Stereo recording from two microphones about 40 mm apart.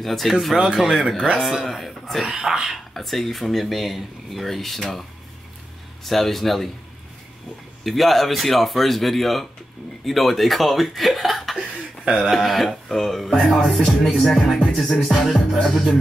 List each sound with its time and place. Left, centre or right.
0.0 s speech: centre
1.0 s speech: centre
1.4 s speech: centre
2.2 s speech: centre
2.9 s speech: centre
6.0 s speech: centre
7.8 s speech: centre
12.0 s a sound: centre
12.3 s speech: centre